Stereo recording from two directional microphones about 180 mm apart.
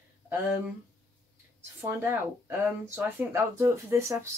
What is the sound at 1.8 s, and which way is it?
Speech, 15° right (ahead or behind).